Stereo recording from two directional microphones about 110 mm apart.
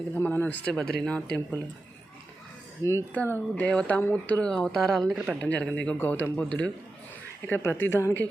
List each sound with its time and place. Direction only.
0.1 s a woman's voice: 20° left (ahead or behind)
3.1 s speech: 15° left (ahead or behind)
5.1 s speech: 10° right (ahead or behind)
5.4 s a woman's voice: 10° left (ahead or behind)